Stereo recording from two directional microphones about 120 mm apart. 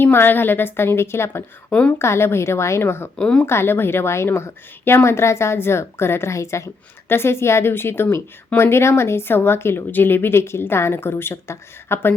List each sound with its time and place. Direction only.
0.0 s a woman's voice: 20° left (ahead or behind)
1.7 s speech: 10° left (ahead or behind)
2.0 s a woman's voice: 20° left (ahead or behind)
3.2 s speech: 10° left (ahead or behind)
3.4 s a woman's voice: 20° left (ahead or behind)